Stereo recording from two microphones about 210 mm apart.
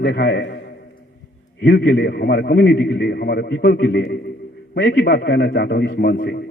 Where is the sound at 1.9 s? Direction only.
50° left (ahead or behind).